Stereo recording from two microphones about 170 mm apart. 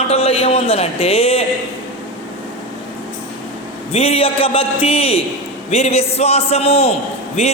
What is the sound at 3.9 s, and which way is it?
Speech, 35° left (ahead or behind).